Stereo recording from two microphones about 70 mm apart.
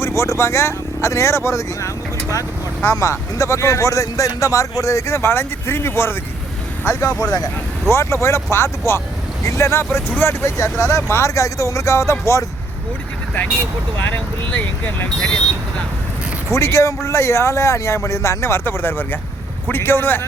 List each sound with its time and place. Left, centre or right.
0.0 s speech: left
7.2 s speech: left
7.9 s speech: left
14.6 s speech: left
15.2 s speech: centre
16.5 s speech: left